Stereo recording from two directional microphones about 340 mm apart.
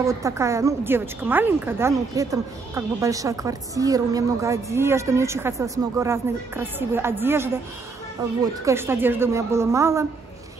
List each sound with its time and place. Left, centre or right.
0.0 s a woman's voice: centre
8.6 s a woman's voice: centre